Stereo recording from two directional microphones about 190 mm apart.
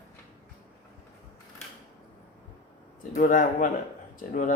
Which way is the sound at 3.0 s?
45° left (ahead or behind).